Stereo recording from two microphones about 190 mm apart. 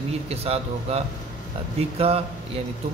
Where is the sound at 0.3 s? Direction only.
30° right (ahead or behind).